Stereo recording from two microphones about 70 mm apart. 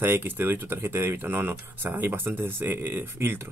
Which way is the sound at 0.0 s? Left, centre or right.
Right.